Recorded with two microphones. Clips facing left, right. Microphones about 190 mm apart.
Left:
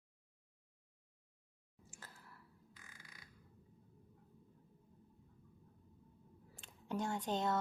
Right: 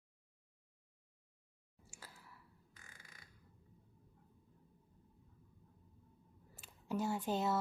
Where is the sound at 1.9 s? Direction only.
10° right (ahead or behind).